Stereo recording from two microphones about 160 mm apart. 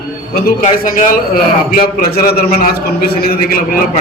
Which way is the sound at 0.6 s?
55° left (ahead or behind).